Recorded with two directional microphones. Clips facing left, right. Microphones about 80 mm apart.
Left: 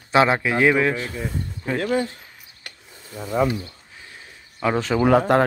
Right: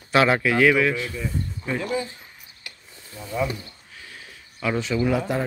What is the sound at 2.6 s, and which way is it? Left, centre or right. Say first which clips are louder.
Wood: left 2 dB; left.